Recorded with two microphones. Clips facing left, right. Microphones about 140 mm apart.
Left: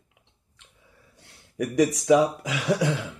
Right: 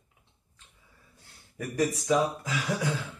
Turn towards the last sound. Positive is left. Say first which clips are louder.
# left 6 dB
turn(degrees=75)  # may be behind; listen again after turning